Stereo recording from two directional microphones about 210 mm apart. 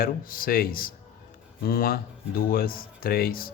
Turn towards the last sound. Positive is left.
turn(degrees=45)  # may be behind; listen again after turning